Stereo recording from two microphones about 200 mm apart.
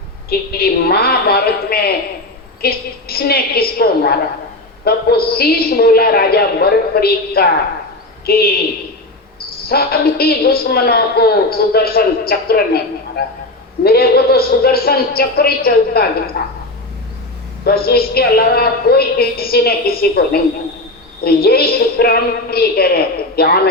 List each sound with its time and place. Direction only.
0.3 s a woman's voice: 50° left (ahead or behind)
9.6 s a woman's voice: 50° left (ahead or behind)
17.7 s a woman's voice: 50° left (ahead or behind)